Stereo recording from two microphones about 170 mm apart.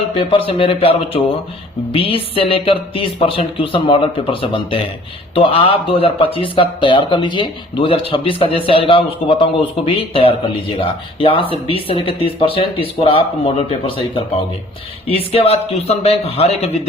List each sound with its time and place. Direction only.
0.1 s a man's voice: 30° left (ahead or behind)